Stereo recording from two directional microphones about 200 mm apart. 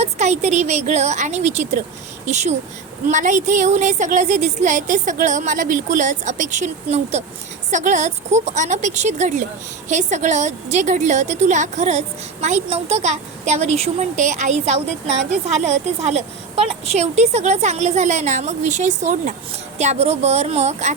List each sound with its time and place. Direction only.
0.0 s a woman's voice: 35° right (ahead or behind)